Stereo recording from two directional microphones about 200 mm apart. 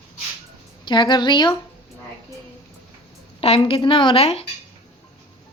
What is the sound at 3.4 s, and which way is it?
A woman's voice, 25° left (ahead or behind).